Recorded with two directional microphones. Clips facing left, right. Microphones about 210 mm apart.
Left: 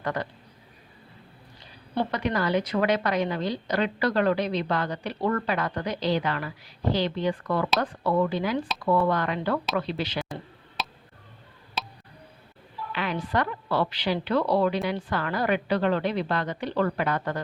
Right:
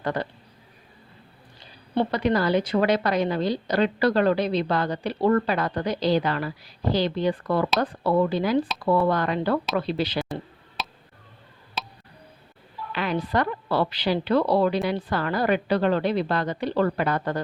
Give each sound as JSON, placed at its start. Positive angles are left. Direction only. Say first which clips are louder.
{"t": 0.0, "sound": "speech", "louder": "right 3 dB", "side_deg": -30}
{"t": 2.0, "sound": "a woman's voice", "louder": "right 4 dB", "side_deg": -35}
{"t": 10.8, "sound": "tick", "louder": "even", "side_deg": 0}
{"t": 12.9, "sound": "a woman's voice", "louder": "right 3 dB", "side_deg": -40}